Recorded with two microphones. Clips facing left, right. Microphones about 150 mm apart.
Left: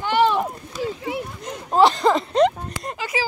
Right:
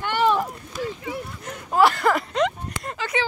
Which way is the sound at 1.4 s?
20° left (ahead or behind).